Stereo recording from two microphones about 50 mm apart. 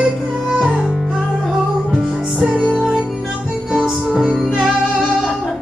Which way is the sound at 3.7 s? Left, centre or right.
Centre.